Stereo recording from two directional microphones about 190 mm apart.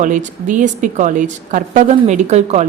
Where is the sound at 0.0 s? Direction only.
40° right (ahead or behind).